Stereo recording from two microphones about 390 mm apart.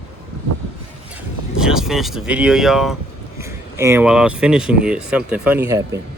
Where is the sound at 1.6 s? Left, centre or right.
Centre.